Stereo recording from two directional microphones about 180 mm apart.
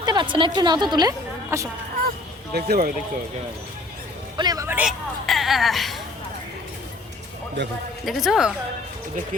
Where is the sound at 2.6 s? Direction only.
55° right (ahead or behind).